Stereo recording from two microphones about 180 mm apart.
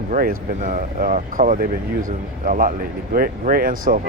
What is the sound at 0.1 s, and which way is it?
Speech, 50° right (ahead or behind).